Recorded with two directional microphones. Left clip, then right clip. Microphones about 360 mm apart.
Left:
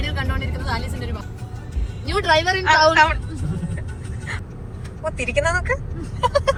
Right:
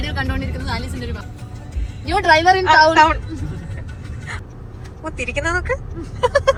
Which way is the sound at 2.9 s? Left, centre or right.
Centre.